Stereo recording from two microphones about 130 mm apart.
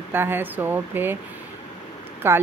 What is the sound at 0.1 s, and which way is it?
Speech, 15° right (ahead or behind).